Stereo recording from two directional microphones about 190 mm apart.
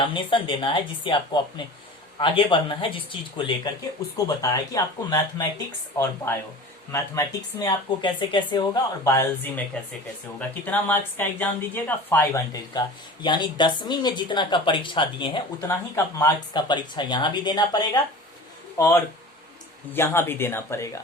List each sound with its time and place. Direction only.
0.0 s speech: 25° left (ahead or behind)
6.9 s speech: 15° left (ahead or behind)
9.7 s speech: 5° left (ahead or behind)
12.7 s speech: 25° left (ahead or behind)